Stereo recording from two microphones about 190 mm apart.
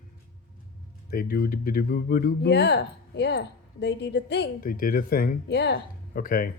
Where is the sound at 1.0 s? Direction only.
50° left (ahead or behind).